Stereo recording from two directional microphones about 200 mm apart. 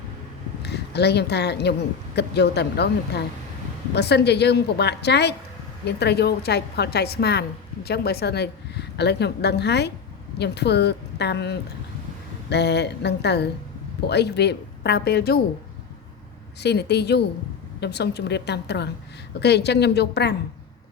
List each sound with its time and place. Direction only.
0.6 s a woman's voice: 55° left (ahead or behind)
16.6 s a woman's voice: 55° left (ahead or behind)